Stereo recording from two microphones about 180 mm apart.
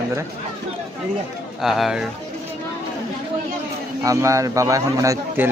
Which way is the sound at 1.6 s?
Centre (ahead or behind).